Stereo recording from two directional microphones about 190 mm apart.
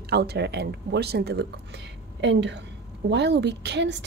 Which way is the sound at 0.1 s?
60° right (ahead or behind).